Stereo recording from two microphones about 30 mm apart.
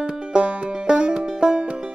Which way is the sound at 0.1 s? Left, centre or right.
Right.